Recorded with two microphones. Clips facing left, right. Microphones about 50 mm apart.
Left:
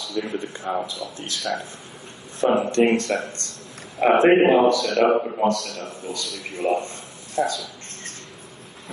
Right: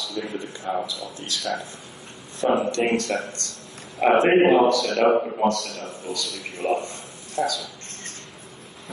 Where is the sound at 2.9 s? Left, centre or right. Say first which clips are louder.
Left 2 dB; left.